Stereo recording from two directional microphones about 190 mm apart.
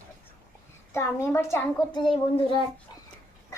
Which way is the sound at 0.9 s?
15° left (ahead or behind).